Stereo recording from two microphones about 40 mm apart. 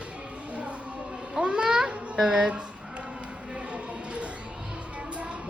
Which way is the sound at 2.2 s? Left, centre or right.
Right.